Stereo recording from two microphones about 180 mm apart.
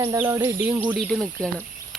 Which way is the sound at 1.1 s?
5° left (ahead or behind).